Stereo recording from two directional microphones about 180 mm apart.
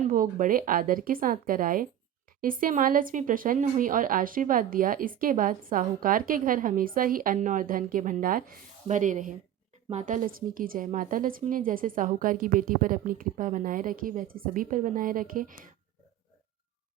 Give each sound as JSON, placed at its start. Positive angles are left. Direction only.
{"t": 0.0, "sound": "a woman's voice", "side_deg": -45}